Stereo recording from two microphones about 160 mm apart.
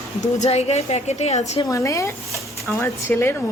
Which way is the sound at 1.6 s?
20° left (ahead or behind).